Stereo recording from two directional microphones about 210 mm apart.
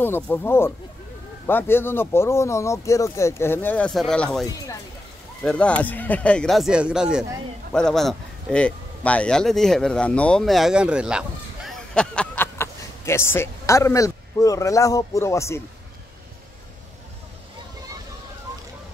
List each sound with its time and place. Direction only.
0.0 s speech: 10° left (ahead or behind)
4.5 s speech: 15° left (ahead or behind)
5.4 s speech: 5° left (ahead or behind)